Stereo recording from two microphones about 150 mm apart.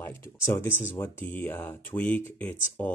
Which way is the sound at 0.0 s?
15° left (ahead or behind).